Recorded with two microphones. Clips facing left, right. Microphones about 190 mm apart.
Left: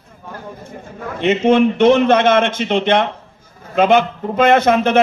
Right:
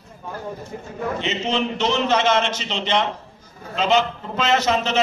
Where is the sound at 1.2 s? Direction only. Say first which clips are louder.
Left 14 dB; 55° left (ahead or behind).